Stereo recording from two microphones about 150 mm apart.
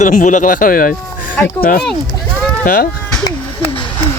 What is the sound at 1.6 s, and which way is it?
Speech, 85° left.